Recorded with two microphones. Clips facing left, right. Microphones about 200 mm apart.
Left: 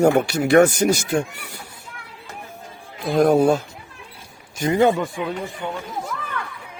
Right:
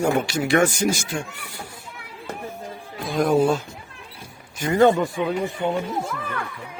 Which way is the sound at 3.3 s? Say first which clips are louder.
Left 2 dB; 60° left (ahead or behind).